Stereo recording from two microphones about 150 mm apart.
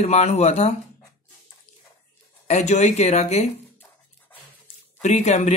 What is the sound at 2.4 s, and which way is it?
Speech, 50° left (ahead or behind).